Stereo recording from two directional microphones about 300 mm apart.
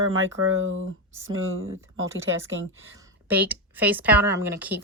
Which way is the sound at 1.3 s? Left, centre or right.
Right.